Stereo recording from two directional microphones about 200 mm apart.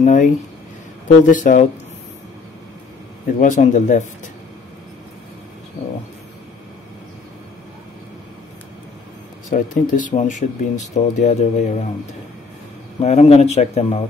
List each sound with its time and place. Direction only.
0.0 s speech: 35° left (ahead or behind)
3.3 s speech: 40° left (ahead or behind)
9.5 s speech: 40° left (ahead or behind)
13.0 s speech: 35° left (ahead or behind)